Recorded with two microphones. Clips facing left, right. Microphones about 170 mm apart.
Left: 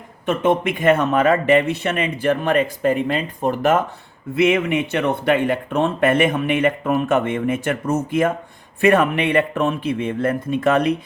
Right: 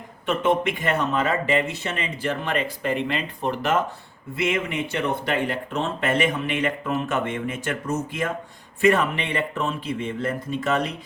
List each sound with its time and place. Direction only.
0.3 s speech: 50° left (ahead or behind)
4.4 s speech: 65° left (ahead or behind)